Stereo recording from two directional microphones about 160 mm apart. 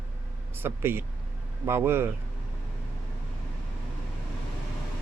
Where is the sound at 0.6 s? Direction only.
15° right (ahead or behind).